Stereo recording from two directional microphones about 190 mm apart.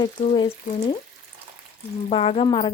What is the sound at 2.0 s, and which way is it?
Speech, 30° left (ahead or behind).